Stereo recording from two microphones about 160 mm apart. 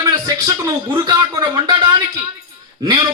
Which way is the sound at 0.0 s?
25° right (ahead or behind).